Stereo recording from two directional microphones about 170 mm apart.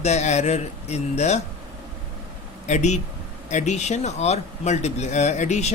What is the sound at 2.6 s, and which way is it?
A man's voice, 45° left (ahead or behind).